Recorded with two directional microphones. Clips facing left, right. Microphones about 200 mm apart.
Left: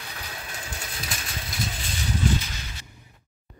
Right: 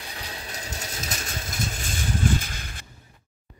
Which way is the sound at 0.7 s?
45° right (ahead or behind).